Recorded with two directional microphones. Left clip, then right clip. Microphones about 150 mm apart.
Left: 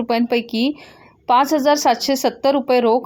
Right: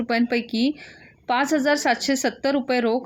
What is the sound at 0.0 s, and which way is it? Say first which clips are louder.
Speech: left 4 dB; 15° left (ahead or behind).